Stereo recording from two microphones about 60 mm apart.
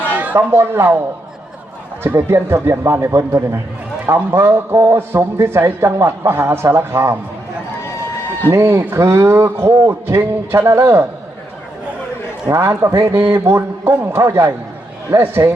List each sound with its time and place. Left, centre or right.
0.1 s a sound: right
0.3 s a man's voice: right
2.0 s a man's voice: right
8.4 s a man's voice: right
12.5 s a man's voice: right
15.4 s speech: right